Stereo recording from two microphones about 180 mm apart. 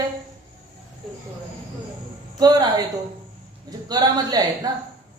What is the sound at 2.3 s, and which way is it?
Speech, 20° right (ahead or behind).